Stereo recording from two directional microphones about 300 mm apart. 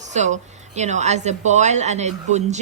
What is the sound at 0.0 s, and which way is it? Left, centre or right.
A woman's voice, right.